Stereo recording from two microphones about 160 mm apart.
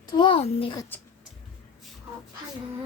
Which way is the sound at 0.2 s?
35° left (ahead or behind).